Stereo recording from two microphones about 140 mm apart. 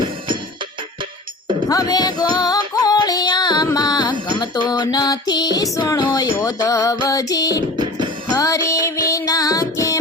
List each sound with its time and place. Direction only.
1.6 s music: 25° left (ahead or behind)